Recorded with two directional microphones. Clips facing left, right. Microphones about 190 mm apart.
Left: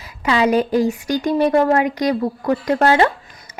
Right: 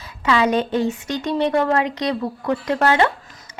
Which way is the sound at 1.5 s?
35° left (ahead or behind).